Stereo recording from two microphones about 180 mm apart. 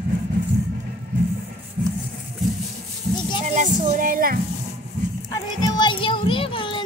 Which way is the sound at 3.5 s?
40° right (ahead or behind).